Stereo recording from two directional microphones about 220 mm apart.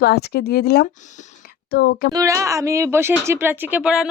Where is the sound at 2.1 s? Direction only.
15° right (ahead or behind).